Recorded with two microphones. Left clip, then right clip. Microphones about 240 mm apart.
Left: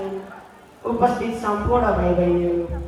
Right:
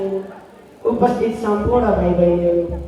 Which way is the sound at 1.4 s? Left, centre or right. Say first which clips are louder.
Right 1 dB; centre.